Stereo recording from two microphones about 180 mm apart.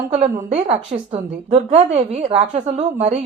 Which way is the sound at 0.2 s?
35° right (ahead or behind).